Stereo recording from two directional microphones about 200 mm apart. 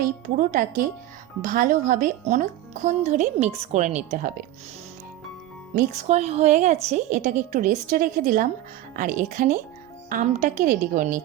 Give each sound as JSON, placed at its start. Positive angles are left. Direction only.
{"t": 0.0, "sound": "speech", "side_deg": -45}
{"t": 5.7, "sound": "speech", "side_deg": -35}